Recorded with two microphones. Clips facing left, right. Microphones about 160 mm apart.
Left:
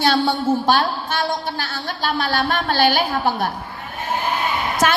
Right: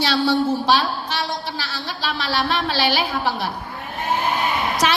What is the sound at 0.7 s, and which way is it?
A woman's voice, 50° left (ahead or behind).